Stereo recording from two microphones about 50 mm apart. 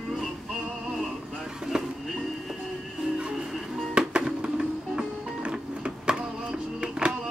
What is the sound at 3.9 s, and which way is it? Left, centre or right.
Music, centre.